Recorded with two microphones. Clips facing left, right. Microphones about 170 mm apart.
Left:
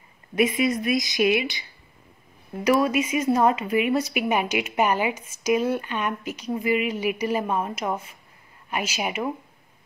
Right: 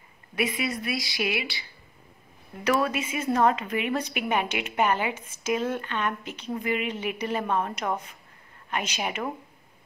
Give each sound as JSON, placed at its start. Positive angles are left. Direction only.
{"t": 0.4, "sound": "a woman's voice", "side_deg": 20}